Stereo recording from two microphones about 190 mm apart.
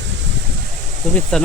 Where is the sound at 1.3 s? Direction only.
5° left (ahead or behind).